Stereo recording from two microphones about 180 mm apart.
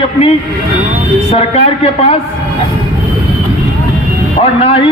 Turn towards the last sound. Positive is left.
turn(degrees=35)  # may be behind; listen again after turning